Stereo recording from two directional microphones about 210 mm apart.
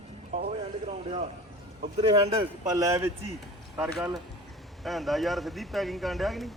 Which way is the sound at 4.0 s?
Centre (ahead or behind).